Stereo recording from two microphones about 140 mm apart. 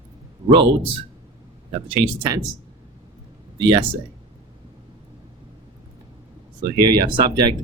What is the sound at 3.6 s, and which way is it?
Speech, 40° right (ahead or behind).